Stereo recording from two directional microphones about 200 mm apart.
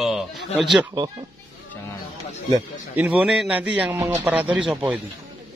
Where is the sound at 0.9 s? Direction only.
20° right (ahead or behind).